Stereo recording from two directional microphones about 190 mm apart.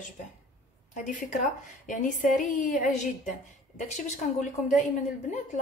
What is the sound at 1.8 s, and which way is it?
A woman's voice, 45° left (ahead or behind).